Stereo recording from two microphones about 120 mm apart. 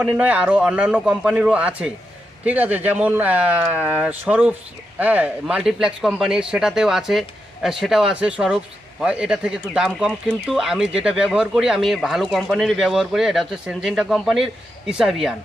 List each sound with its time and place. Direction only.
0.0 s speech: 10° right (ahead or behind)